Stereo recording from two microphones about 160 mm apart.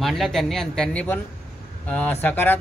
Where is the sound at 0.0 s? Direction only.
Centre (ahead or behind).